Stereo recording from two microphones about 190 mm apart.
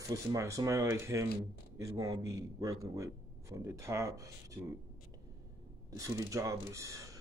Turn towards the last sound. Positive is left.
turn(degrees=-15)  # may be behind; listen again after turning